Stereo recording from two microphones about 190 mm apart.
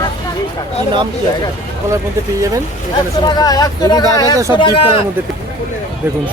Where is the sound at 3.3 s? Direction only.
20° left (ahead or behind).